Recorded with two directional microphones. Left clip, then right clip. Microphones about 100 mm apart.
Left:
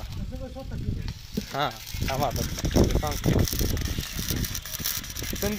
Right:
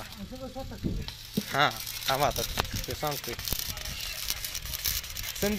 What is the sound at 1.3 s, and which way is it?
Sizzle, centre (ahead or behind).